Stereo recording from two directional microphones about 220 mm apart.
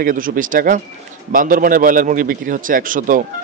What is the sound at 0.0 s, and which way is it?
Speech, 40° right (ahead or behind).